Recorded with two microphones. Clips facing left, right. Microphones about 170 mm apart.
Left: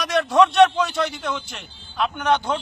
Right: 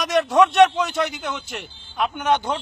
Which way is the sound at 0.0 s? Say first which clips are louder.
Right 2 dB; 15° right (ahead or behind).